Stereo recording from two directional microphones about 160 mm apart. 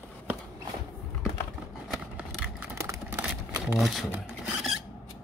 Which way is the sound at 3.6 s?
Centre (ahead or behind).